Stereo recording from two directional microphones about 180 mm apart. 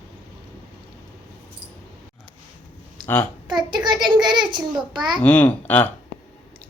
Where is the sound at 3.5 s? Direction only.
25° right (ahead or behind).